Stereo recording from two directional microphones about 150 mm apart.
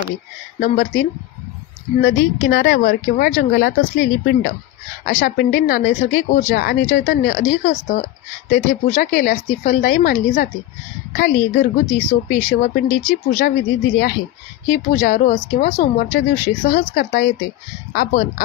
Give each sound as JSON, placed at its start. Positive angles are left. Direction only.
{"t": 0.6, "sound": "speech", "side_deg": 65}
{"t": 6.9, "sound": "speech", "side_deg": 55}
{"t": 9.8, "sound": "speech", "side_deg": 70}
{"t": 14.7, "sound": "speech", "side_deg": 65}
{"t": 16.9, "sound": "a woman's voice", "side_deg": 75}
{"t": 17.9, "sound": "speech", "side_deg": 65}